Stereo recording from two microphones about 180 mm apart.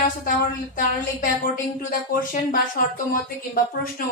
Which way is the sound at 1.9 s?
50° left (ahead or behind).